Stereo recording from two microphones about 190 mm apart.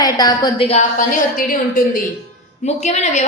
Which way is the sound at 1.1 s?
45° left (ahead or behind).